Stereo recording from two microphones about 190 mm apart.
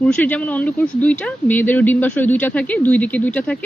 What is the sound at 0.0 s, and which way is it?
Speech, 5° left (ahead or behind).